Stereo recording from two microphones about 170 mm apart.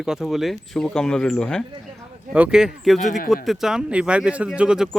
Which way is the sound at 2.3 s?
5° right (ahead or behind).